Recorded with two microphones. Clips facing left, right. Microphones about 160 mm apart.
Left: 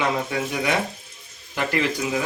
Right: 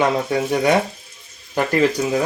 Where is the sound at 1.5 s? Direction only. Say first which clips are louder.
Right 6 dB; 40° right (ahead or behind).